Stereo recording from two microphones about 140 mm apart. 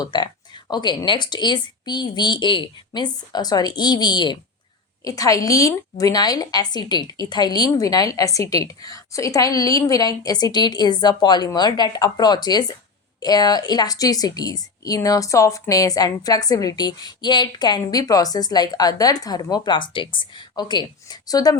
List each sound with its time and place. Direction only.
0.0 s a woman's voice: 30° left (ahead or behind)